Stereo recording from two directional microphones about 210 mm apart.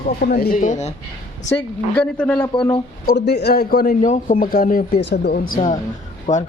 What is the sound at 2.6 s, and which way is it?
Speech, 25° left (ahead or behind).